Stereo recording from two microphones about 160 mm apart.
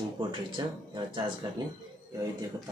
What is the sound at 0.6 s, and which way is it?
Speech, 25° right (ahead or behind).